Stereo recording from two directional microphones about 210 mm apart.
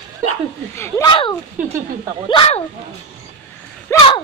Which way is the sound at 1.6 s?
10° right (ahead or behind).